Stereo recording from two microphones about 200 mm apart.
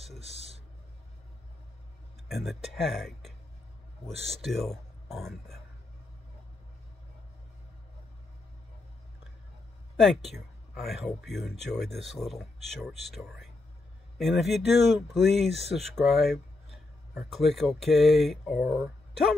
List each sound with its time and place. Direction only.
0.2 s a sound: 30° right (ahead or behind)
2.2 s speech: centre (ahead or behind)
10.3 s speech: centre (ahead or behind)